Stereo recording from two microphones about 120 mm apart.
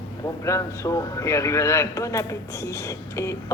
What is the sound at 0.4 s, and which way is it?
A man's voice, 25° left (ahead or behind).